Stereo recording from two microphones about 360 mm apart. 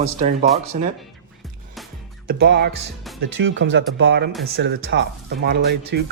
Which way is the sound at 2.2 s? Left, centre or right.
Right.